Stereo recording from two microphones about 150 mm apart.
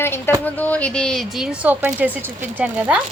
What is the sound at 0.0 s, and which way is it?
Speech, 15° left (ahead or behind).